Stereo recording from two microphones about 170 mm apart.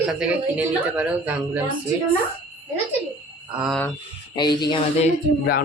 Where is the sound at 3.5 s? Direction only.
5° right (ahead or behind).